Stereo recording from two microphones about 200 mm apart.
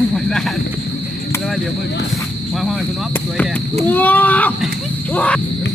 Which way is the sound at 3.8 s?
10° left (ahead or behind).